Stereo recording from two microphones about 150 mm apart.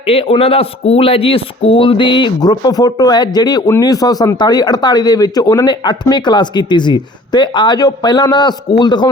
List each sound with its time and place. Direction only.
0.1 s a man's voice: 40° left (ahead or behind)